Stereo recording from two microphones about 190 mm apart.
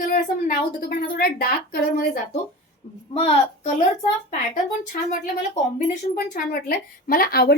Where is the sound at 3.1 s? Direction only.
35° left (ahead or behind).